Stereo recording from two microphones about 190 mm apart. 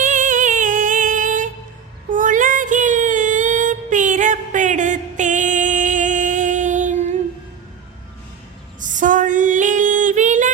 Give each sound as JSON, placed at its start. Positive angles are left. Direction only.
{"t": 0.0, "sound": "music", "side_deg": -45}
{"t": 2.1, "sound": "child singing", "side_deg": -45}
{"t": 8.8, "sound": "female singing", "side_deg": -40}